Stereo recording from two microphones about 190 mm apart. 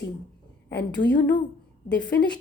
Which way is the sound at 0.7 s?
60° left (ahead or behind).